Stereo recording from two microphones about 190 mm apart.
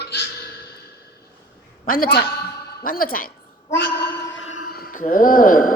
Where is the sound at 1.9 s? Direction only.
50° left (ahead or behind).